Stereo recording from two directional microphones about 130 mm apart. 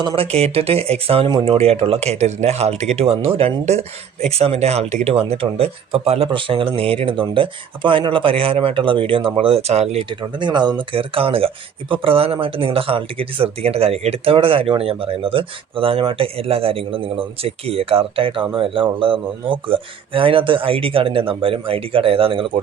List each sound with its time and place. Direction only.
0.2 s speech: 50° right (ahead or behind)